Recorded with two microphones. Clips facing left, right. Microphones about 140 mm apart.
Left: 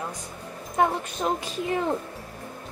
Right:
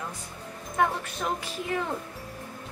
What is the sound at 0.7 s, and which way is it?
A woman's voice, 20° left (ahead or behind).